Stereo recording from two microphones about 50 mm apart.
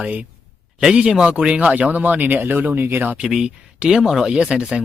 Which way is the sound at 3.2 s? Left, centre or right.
Centre.